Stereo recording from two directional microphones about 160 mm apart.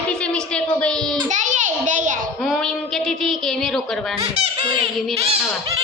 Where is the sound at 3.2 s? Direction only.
Centre (ahead or behind).